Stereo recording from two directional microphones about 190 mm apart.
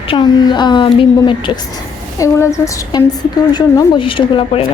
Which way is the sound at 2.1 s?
15° left (ahead or behind).